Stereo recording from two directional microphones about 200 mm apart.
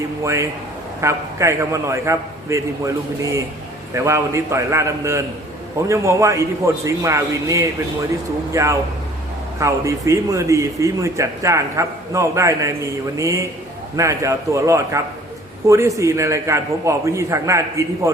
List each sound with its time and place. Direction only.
1.0 s a man's voice: 15° right (ahead or behind)
3.9 s a man's voice: 15° right (ahead or behind)